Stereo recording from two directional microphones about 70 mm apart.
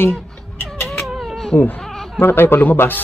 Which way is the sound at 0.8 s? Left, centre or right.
Centre.